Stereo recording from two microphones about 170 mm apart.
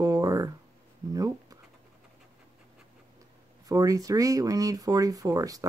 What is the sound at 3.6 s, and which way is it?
Speech, 20° right (ahead or behind).